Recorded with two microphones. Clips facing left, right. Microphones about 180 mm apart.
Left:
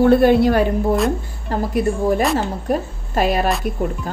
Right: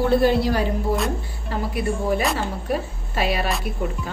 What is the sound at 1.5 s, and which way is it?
Speech, 45° left (ahead or behind).